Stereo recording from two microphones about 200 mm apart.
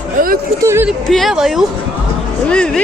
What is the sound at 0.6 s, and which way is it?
Speech, 10° right (ahead or behind).